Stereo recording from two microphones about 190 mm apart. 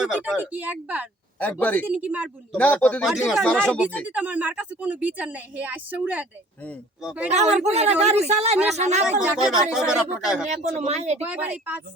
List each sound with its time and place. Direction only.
0.0 s speech: centre (ahead or behind)
1.4 s speech: 10° left (ahead or behind)
1.9 s speech: 10° right (ahead or behind)
2.6 s speech: 5° left (ahead or behind)
4.0 s speech: 5° right (ahead or behind)
7.3 s speech: 35° right (ahead or behind)
9.4 s speech: centre (ahead or behind)
10.5 s speech: 35° right (ahead or behind)
11.2 s speech: 10° right (ahead or behind)